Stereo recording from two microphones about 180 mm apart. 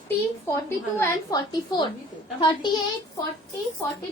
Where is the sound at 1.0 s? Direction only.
15° left (ahead or behind).